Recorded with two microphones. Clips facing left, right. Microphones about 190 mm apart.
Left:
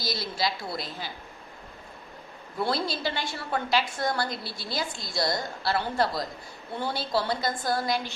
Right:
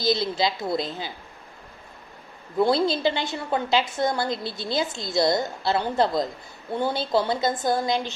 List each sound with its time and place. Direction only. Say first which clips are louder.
0.0 s a woman's voice: right 7 dB; 20° right (ahead or behind)
2.6 s a woman's voice: right 8 dB; 20° right (ahead or behind)